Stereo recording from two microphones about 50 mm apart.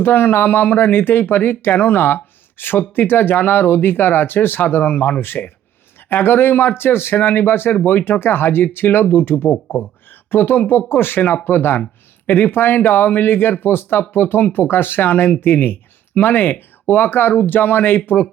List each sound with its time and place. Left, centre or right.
0.0 s speech: left